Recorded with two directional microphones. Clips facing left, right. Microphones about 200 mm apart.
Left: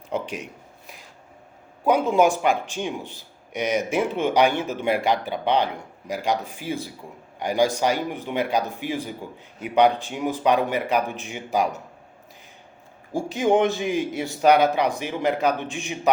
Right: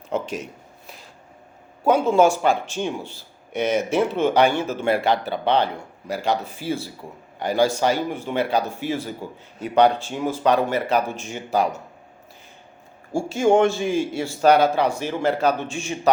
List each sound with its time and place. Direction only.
0.1 s speech: 15° left (ahead or behind)
1.9 s speech: 15° left (ahead or behind)
13.1 s speech: 15° left (ahead or behind)